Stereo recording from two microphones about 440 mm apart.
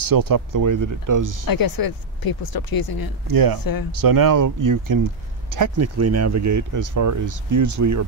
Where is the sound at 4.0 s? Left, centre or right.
Right.